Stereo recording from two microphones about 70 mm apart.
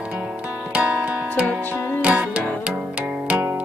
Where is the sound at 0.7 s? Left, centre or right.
Centre.